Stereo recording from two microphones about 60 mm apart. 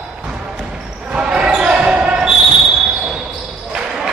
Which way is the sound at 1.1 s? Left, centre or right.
Centre.